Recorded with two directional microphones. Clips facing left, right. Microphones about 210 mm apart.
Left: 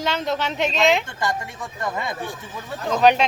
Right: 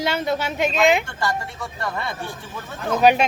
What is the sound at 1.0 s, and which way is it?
Speech, 15° left (ahead or behind).